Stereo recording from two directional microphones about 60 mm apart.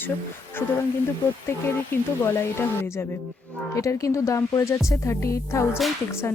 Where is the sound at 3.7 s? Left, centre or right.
Left.